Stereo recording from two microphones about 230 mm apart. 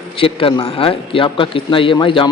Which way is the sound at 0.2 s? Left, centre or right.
Left.